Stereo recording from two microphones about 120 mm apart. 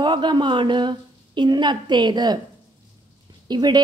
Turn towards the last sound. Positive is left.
turn(degrees=-35)  # may be behind; listen again after turning